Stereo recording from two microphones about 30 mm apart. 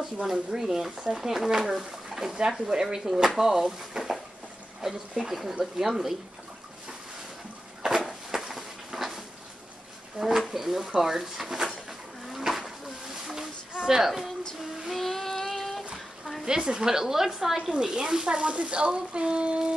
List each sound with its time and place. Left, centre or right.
0.0 s stir: centre
0.5 s speech: centre
2.0 s a sound: centre
2.7 s a woman's voice: centre
5.2 s speech: centre
7.8 s a sound: centre
10.5 s speech: centre
12.3 s a sound: centre
13.7 s speech: centre
15.0 s child singing: centre
16.4 s a woman's voice: right
18.4 s speech: right